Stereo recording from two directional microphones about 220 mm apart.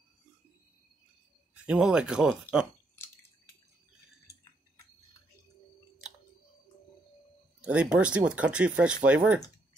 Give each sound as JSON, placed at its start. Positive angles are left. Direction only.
{"t": 1.5, "sound": "speech", "side_deg": -5}
{"t": 4.3, "sound": "a sound", "side_deg": 15}
{"t": 7.6, "sound": "speech", "side_deg": -5}